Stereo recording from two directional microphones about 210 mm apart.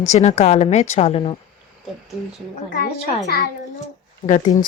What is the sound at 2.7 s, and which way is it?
Speech, 40° left (ahead or behind).